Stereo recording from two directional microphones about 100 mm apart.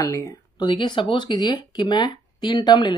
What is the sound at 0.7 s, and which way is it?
Speech, 55° left (ahead or behind).